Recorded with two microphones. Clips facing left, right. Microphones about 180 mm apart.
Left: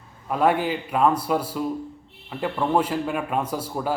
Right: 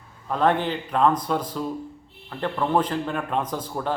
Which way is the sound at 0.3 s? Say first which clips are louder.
Left 1 dB; 10° left (ahead or behind).